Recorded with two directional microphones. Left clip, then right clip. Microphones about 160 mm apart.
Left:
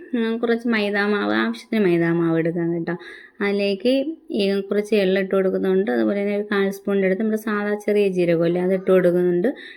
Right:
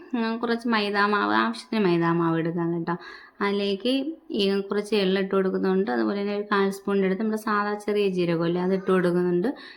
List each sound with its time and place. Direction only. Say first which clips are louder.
0.1 s speech: left 5 dB; 10° left (ahead or behind)